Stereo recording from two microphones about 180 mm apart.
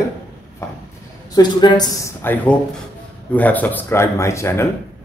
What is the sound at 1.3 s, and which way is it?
Speech, 25° left (ahead or behind).